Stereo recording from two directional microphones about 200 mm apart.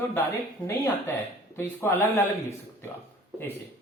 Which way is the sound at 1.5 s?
10° left (ahead or behind).